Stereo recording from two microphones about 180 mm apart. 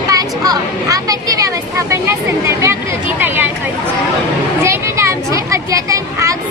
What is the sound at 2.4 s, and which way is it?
Chatter, 15° right (ahead or behind).